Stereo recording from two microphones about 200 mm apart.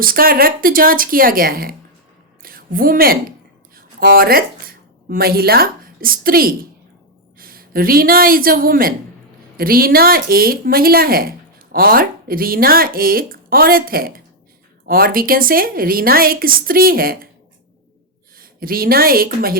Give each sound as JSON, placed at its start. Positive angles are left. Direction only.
{"t": 0.0, "sound": "a woman's voice", "side_deg": -45}
{"t": 18.3, "sound": "a woman's voice", "side_deg": -45}